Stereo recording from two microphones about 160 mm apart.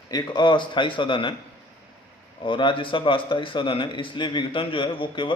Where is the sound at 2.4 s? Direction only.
30° left (ahead or behind).